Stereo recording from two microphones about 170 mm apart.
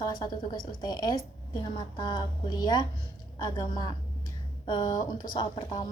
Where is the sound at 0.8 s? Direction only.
25° left (ahead or behind).